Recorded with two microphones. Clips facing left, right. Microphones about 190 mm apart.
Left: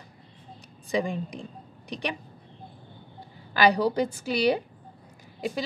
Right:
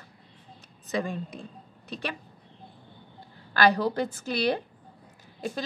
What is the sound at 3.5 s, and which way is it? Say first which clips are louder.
A woman's voice: left 2 dB; 15° left (ahead or behind).